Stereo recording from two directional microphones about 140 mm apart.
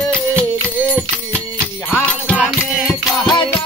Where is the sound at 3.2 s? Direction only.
30° left (ahead or behind).